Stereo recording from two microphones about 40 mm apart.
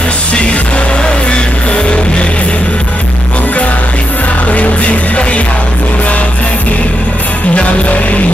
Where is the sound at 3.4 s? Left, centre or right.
Left.